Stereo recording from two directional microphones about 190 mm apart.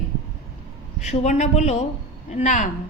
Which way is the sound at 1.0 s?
35° left (ahead or behind).